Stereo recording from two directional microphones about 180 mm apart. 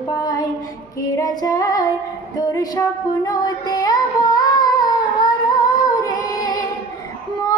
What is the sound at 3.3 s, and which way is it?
Music, 20° left (ahead or behind).